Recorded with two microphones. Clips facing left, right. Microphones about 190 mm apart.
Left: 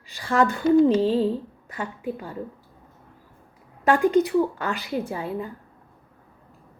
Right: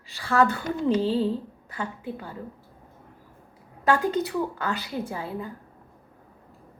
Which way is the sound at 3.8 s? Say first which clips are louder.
Left 5 dB; 15° left (ahead or behind).